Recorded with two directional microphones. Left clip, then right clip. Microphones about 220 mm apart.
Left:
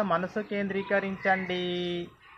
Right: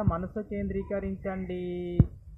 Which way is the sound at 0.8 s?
30° right (ahead or behind).